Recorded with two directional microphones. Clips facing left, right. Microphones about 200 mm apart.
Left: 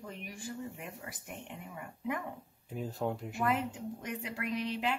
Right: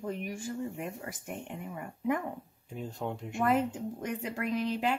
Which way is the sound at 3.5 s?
45° right (ahead or behind).